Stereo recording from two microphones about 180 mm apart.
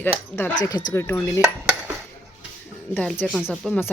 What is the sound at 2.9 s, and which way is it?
Speech, 10° left (ahead or behind).